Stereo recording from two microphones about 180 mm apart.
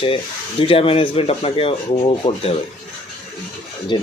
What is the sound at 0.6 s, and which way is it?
Speech, 30° left (ahead or behind).